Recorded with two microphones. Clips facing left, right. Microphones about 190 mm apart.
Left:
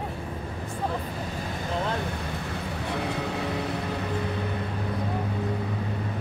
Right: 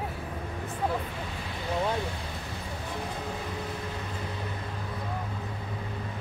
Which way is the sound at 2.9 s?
75° left (ahead or behind).